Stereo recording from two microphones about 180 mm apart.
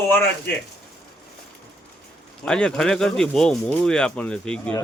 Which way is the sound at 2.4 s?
5° left (ahead or behind).